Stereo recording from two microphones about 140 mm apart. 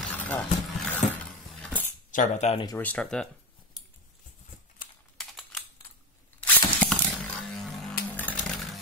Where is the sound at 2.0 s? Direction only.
65° left (ahead or behind).